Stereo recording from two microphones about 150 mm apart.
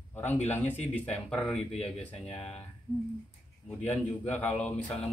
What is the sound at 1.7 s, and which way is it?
Speech, 40° left (ahead or behind).